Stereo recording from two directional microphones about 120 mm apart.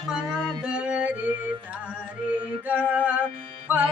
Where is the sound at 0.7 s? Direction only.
10° right (ahead or behind).